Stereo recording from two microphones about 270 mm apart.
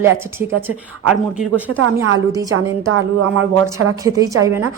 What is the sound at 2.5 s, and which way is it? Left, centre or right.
Speech, right.